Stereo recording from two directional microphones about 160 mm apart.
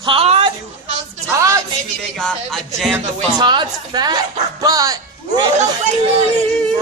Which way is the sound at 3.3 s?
30° right (ahead or behind).